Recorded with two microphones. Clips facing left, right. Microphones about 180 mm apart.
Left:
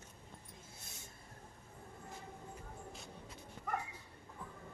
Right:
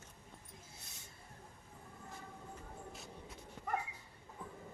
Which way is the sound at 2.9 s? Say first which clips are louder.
Even; centre (ahead or behind).